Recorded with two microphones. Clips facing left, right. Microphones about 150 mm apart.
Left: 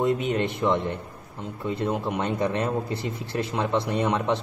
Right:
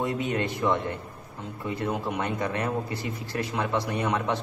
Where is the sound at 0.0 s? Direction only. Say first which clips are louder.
Left 4 dB; 20° left (ahead or behind).